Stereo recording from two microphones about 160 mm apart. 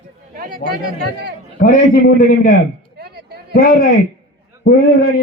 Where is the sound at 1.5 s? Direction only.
55° left (ahead or behind).